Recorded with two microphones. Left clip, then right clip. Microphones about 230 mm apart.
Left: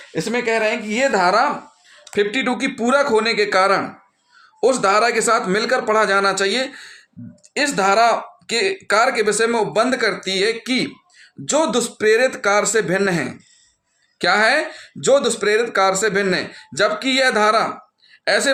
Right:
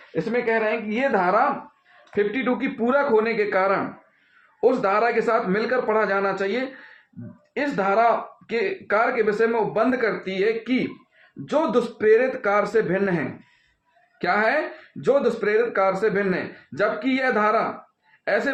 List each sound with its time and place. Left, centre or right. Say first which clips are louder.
0.1 s speech: left 3 dB; left